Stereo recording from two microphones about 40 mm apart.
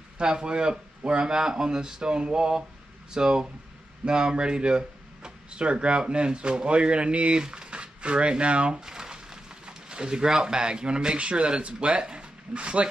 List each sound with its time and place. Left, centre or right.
0.2 s speech: right
8.8 s a sound: centre
10.3 s speech: centre